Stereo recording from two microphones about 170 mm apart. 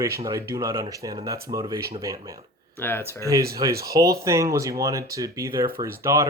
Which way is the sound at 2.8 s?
10° left (ahead or behind).